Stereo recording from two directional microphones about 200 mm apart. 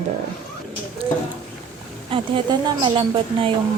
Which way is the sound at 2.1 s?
25° right (ahead or behind).